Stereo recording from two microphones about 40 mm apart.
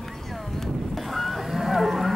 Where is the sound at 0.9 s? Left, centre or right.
Centre.